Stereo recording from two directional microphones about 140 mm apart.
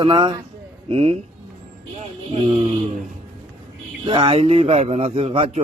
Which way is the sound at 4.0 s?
35° right (ahead or behind).